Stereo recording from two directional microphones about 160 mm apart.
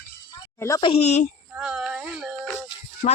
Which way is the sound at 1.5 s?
5° right (ahead or behind).